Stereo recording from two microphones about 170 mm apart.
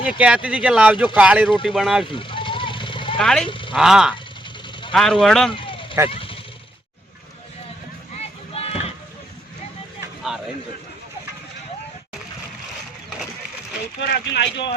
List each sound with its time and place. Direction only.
0.0 s speech: 5° right (ahead or behind)
2.0 s vehicle: 30° left (ahead or behind)
3.2 s speech: 5° left (ahead or behind)
3.4 s speech: 30° left (ahead or behind)
3.8 s speech: 5° right (ahead or behind)
5.5 s vehicle: 30° left (ahead or behind)
6.1 s a sound: 30° left (ahead or behind)
8.2 s a sound: 35° left (ahead or behind)
14.0 s speech: 85° left